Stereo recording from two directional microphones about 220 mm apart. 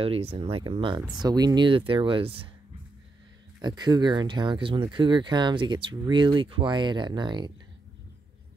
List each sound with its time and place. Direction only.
0.0 s speech: 25° right (ahead or behind)
3.6 s speech: 20° right (ahead or behind)